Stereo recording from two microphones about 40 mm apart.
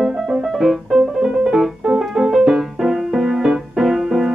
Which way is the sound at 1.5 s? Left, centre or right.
Centre.